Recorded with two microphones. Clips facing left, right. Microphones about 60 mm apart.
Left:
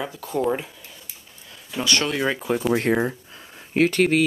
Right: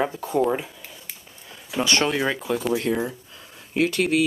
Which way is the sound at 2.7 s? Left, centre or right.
Left.